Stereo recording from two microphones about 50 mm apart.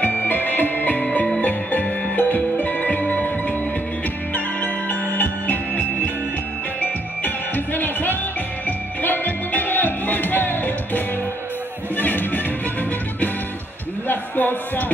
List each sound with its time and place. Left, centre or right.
0.0 s music: left
6.8 s music: left
14.0 s music: left